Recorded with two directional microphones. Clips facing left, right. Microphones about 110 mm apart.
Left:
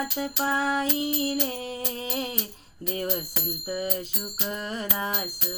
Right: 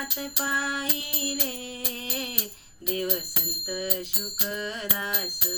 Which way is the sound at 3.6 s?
35° left (ahead or behind).